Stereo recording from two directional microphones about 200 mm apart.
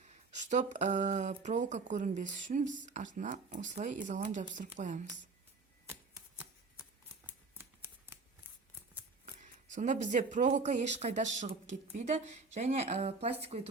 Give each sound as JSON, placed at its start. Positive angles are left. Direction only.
{"t": 0.0, "sound": "speech", "side_deg": -35}
{"t": 5.9, "sound": "a sound", "side_deg": -10}
{"t": 9.2, "sound": "speech", "side_deg": -40}